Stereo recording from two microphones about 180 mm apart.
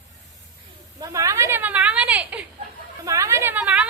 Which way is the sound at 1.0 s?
20° right (ahead or behind).